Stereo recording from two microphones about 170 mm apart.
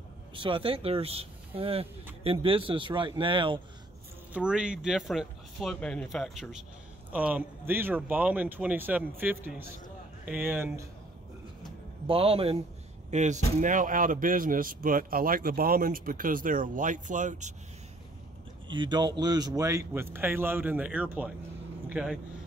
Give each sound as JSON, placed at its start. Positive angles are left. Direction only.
{"t": 0.3, "sound": "speech", "side_deg": -30}
{"t": 4.3, "sound": "a man's voice", "side_deg": -5}
{"t": 12.1, "sound": "speech", "side_deg": -35}
{"t": 13.1, "sound": "speech", "side_deg": -45}
{"t": 18.7, "sound": "a man's voice", "side_deg": -25}